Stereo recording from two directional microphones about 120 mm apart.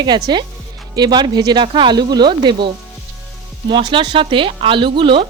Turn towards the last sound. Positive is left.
turn(degrees=-45)  # may be behind; listen again after turning